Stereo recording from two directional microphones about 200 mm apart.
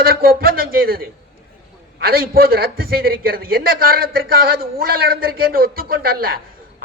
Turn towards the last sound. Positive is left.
turn(degrees=-50)  # may be behind; listen again after turning